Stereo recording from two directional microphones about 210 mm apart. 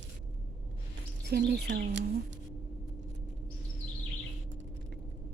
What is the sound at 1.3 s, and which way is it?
Speech, 50° right (ahead or behind).